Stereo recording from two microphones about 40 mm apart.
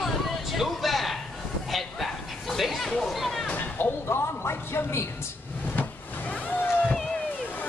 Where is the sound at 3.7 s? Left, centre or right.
Left.